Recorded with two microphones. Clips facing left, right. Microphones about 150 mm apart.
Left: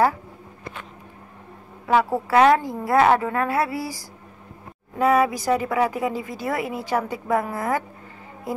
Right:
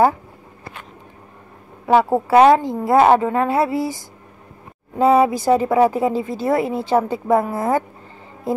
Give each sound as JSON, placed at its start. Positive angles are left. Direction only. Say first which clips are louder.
{"t": 1.9, "sound": "a woman's voice", "louder": "right 5 dB", "side_deg": -25}